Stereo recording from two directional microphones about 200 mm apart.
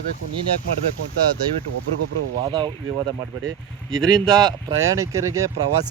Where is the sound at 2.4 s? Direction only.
20° right (ahead or behind).